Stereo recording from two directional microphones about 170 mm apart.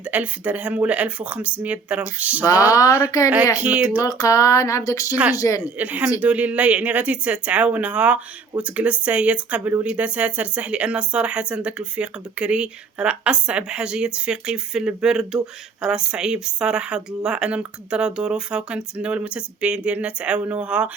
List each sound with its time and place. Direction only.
0.0 s speech: 10° right (ahead or behind)
2.4 s speech: 20° left (ahead or behind)
3.6 s speech: 10° right (ahead or behind)
4.0 s speech: 20° left (ahead or behind)
5.1 s speech: 10° right (ahead or behind)
5.4 s speech: 20° left (ahead or behind)
5.6 s speech: 10° right (ahead or behind)